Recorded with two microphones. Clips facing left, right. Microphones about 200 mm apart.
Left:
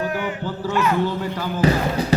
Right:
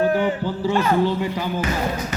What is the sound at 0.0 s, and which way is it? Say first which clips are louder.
Music: right 6 dB; 35° right (ahead or behind).